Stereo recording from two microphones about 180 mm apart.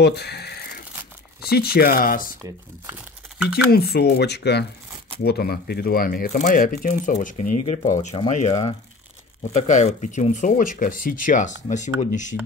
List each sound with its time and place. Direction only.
0.0 s a sound: 65° left (ahead or behind)
1.4 s speech: 60° left (ahead or behind)
3.7 s speech: 60° left (ahead or behind); by 12.4 s 40° left (ahead or behind)